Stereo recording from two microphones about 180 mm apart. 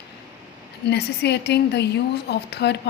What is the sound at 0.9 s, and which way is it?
A woman's voice, 65° left (ahead or behind).